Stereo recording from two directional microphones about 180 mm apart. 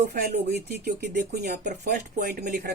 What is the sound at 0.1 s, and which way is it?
Speech, 60° right (ahead or behind).